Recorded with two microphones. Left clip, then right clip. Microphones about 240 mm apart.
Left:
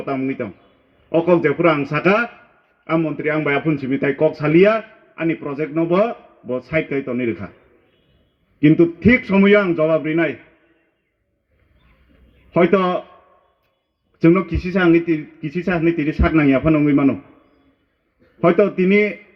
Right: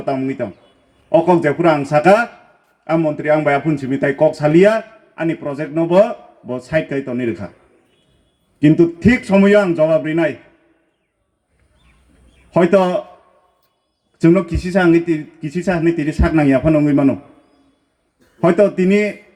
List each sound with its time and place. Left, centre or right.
0.1 s a man's voice: right
8.6 s a man's voice: right
12.7 s a man's voice: right
14.2 s a man's voice: right
18.3 s a man's voice: right